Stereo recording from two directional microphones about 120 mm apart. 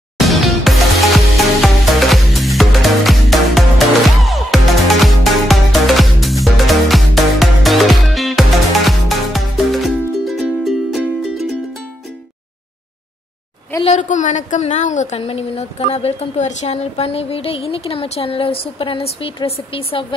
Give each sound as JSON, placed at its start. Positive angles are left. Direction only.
{"t": 0.2, "sound": "music", "side_deg": 0}
{"t": 13.8, "sound": "a woman's voice", "side_deg": 90}